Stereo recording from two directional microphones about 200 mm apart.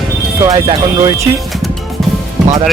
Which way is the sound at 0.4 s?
25° right (ahead or behind).